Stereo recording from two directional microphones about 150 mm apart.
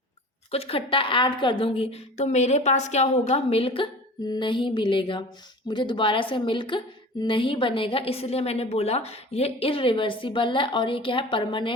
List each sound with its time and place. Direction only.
0.5 s a woman's voice: 40° left (ahead or behind)